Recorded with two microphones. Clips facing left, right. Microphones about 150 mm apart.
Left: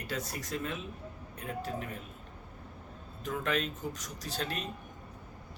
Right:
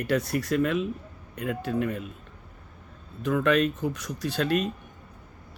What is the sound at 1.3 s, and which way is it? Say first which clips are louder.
Speech: right 9 dB; 90° right.